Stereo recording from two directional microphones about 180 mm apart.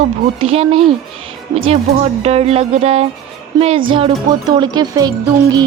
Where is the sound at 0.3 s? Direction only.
35° right (ahead or behind).